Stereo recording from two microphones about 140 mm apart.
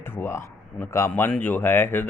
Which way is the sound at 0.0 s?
15° left (ahead or behind).